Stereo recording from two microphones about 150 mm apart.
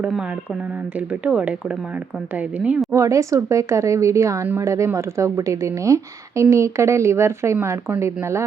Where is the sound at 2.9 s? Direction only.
20° right (ahead or behind).